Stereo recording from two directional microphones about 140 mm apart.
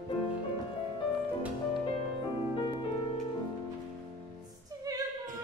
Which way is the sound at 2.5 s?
35° left (ahead or behind).